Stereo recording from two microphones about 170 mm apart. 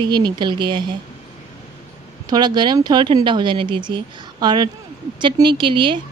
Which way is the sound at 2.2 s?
25° right (ahead or behind).